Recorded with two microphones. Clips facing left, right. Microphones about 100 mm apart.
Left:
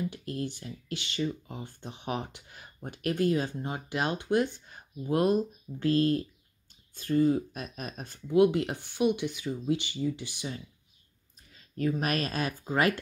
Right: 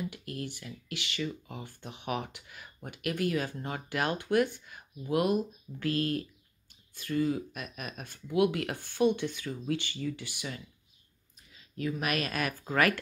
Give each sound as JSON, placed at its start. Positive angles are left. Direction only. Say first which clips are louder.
{"t": 0.1, "sound": "speech", "louder": "left 4 dB", "side_deg": 30}
{"t": 11.3, "sound": "speech", "louder": "left 4 dB", "side_deg": 40}